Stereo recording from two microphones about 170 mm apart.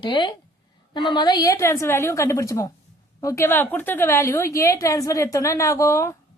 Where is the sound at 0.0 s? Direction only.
25° left (ahead or behind).